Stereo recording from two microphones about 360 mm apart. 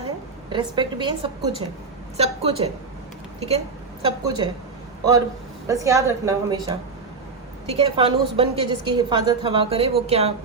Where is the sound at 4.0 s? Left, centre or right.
Centre.